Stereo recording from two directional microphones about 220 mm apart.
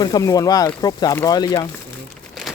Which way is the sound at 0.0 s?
15° left (ahead or behind).